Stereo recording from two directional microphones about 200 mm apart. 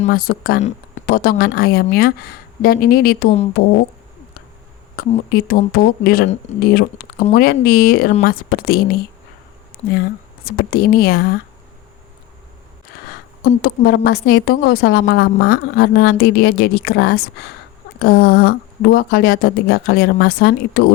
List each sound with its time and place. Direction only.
0.1 s a woman's voice: 45° left (ahead or behind)
4.9 s a woman's voice: 45° left (ahead or behind)
13.6 s a woman's voice: 50° left (ahead or behind)